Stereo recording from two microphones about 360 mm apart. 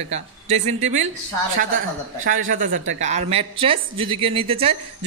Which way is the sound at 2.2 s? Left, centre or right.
Right.